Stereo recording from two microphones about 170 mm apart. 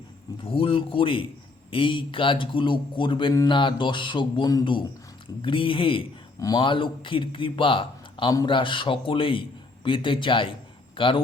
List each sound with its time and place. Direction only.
0.4 s a man's voice: 35° left (ahead or behind)